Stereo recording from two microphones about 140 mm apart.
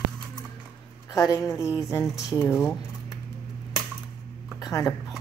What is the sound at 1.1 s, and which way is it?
Speech, 25° left (ahead or behind).